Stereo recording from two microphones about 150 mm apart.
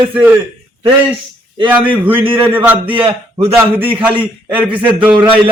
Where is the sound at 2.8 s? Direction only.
35° right (ahead or behind).